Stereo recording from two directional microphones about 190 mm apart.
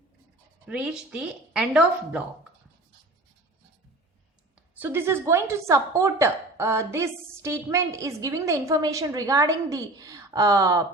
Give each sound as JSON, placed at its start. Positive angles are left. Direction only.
{"t": 0.7, "sound": "speech", "side_deg": -5}
{"t": 4.7, "sound": "a woman's voice", "side_deg": -10}